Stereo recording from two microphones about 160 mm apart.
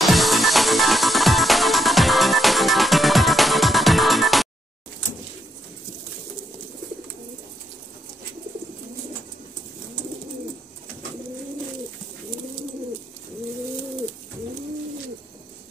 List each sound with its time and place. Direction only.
0.0 s music: centre (ahead or behind)